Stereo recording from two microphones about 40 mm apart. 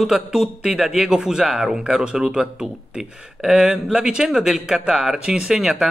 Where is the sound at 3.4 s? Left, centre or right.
Centre.